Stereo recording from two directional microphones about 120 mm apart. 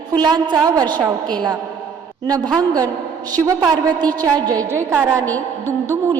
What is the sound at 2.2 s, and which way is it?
A woman's voice, 35° right (ahead or behind).